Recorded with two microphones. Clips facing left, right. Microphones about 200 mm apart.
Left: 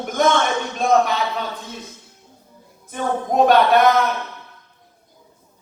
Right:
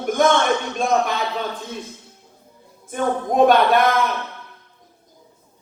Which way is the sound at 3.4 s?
50° right (ahead or behind).